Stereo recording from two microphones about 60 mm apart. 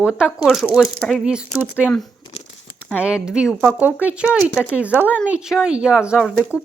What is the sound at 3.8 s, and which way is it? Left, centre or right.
Speech, right.